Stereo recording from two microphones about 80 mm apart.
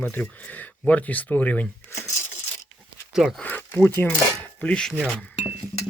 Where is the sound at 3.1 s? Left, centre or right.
Centre.